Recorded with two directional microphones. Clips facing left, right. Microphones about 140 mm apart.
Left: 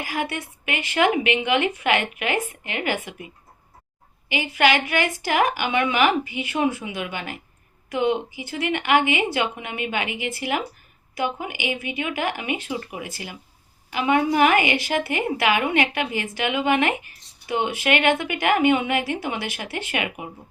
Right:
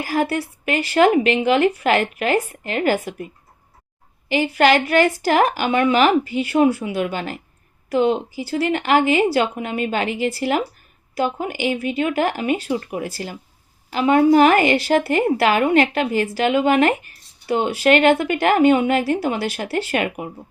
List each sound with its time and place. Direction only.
0.0 s a woman's voice: 35° right (ahead or behind)
4.3 s a woman's voice: 40° right (ahead or behind)
6.2 s speech: 15° left (ahead or behind)
6.6 s a woman's voice: 35° right (ahead or behind)